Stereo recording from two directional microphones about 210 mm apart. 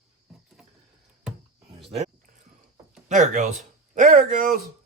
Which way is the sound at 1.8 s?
30° right (ahead or behind).